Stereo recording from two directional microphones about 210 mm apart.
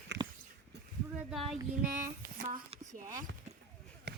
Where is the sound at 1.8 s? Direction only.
40° right (ahead or behind).